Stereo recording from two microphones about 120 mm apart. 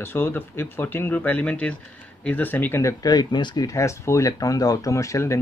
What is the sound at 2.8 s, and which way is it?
Speech, 30° left (ahead or behind).